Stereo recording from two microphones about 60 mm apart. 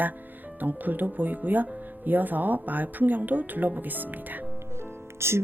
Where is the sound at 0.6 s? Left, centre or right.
Right.